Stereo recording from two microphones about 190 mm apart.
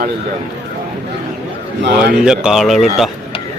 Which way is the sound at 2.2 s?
5° right (ahead or behind).